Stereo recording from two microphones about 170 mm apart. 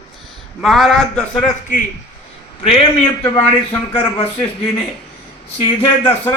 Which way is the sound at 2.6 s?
35° left (ahead or behind).